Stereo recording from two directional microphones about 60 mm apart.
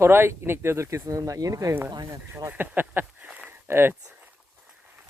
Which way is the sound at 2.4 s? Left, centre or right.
Right.